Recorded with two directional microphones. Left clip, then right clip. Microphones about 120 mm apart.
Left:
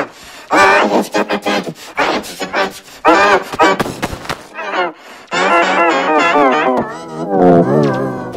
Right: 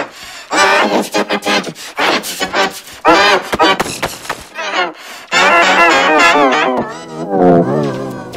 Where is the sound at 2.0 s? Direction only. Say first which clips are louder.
Right 5 dB; 5° left (ahead or behind).